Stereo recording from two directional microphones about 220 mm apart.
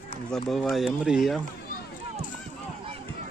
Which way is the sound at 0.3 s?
Centre (ahead or behind).